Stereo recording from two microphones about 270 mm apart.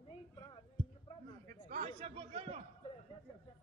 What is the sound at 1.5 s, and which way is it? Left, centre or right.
A man's voice, right.